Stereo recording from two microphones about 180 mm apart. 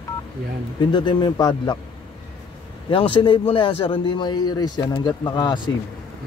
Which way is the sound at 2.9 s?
30° left (ahead or behind).